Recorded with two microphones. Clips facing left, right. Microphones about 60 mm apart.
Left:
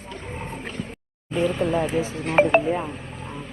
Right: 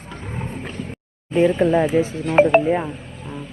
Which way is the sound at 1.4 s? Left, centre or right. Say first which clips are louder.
Right 6 dB; right.